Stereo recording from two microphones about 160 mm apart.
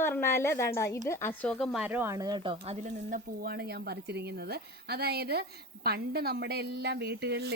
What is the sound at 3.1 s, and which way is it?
A woman's voice, 75° right (ahead or behind).